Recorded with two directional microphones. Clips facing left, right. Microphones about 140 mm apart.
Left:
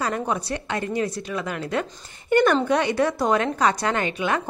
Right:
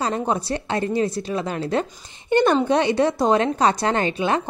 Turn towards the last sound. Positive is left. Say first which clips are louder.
# right 3 dB
turn(degrees=-30)  # may be behind; listen again after turning